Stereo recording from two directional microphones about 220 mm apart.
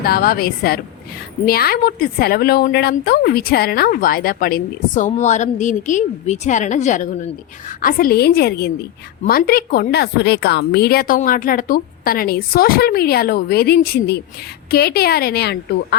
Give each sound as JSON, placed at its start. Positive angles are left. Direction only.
{"t": 0.0, "sound": "a woman's voice", "side_deg": 45}